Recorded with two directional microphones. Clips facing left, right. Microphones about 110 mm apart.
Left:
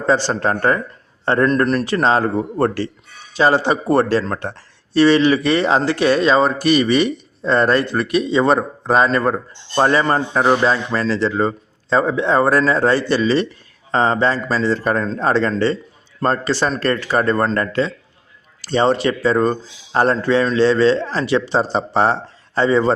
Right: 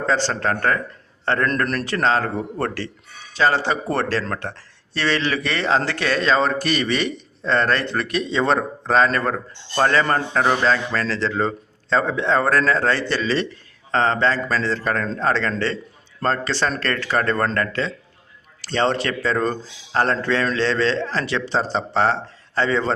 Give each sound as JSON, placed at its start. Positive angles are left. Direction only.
{"t": 0.0, "sound": "a man's voice", "side_deg": 15}